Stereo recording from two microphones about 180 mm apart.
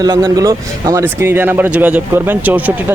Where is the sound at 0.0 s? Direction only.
20° right (ahead or behind).